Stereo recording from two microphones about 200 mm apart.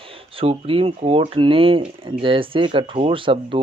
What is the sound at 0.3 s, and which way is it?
Speech, 25° right (ahead or behind).